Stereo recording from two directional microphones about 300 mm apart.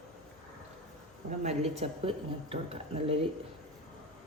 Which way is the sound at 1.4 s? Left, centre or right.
Right.